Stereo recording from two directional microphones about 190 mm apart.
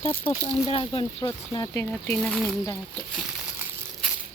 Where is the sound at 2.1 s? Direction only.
5° left (ahead or behind).